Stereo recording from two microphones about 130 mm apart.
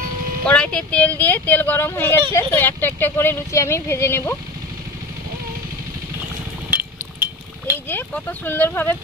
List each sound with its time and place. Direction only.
0.5 s speech: 5° left (ahead or behind)
6.7 s cutlery: 15° right (ahead or behind)
7.9 s speech: 15° left (ahead or behind)